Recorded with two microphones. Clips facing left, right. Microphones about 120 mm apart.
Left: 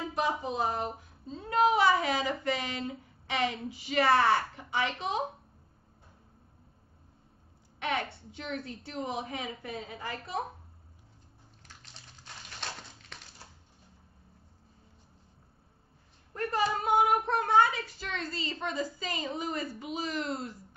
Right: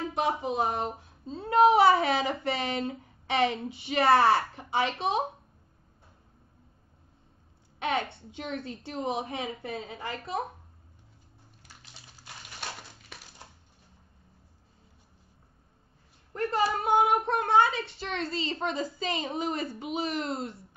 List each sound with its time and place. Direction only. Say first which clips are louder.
0.4 s speech: right 3 dB; 25° right (ahead or behind)
7.8 s speech: right 3 dB; 25° right (ahead or behind)
11.6 s a sound: even; 10° right (ahead or behind)
13.1 s crushing: right 2 dB; 10° right (ahead or behind)
16.3 s speech: right 2 dB; 25° right (ahead or behind)